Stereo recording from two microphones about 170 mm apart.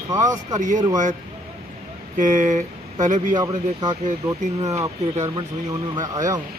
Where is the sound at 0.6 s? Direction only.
50° right (ahead or behind).